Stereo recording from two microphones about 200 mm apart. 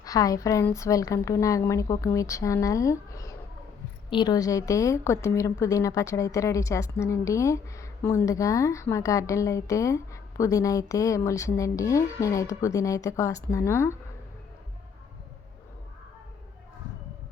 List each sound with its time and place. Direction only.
0.0 s a woman's voice: 15° left (ahead or behind)